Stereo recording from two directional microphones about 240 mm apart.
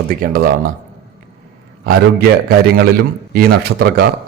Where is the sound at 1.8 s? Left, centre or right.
Right.